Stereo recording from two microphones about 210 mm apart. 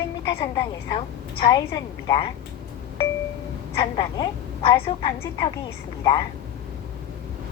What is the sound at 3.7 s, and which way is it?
A woman's voice, 25° left (ahead or behind).